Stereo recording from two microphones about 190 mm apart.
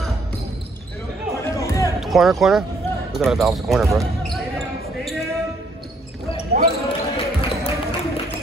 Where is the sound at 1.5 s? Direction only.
15° left (ahead or behind).